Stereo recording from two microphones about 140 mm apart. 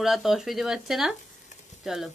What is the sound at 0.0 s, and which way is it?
Speech, centre (ahead or behind).